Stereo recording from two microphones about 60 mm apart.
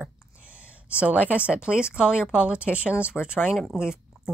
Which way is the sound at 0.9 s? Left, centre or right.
Right.